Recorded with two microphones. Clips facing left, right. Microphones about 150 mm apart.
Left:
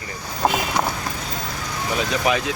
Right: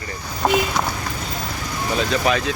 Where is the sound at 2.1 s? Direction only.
15° left (ahead or behind).